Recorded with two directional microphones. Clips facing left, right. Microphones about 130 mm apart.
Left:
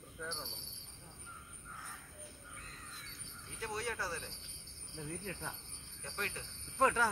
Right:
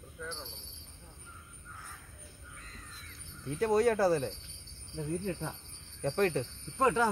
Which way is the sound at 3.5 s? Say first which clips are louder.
Right 14 dB; 50° right (ahead or behind).